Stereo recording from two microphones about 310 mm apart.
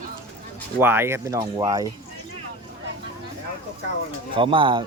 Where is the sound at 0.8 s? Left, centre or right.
Centre.